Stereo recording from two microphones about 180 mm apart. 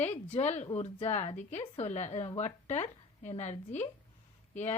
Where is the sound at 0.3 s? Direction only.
40° left (ahead or behind).